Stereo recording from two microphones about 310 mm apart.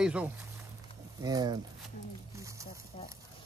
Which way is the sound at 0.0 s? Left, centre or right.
Centre.